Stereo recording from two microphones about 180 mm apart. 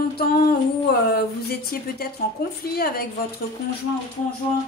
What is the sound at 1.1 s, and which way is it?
A woman's voice, 60° left (ahead or behind).